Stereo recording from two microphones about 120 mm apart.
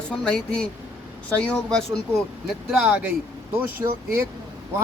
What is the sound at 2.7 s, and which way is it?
Speech, 10° right (ahead or behind).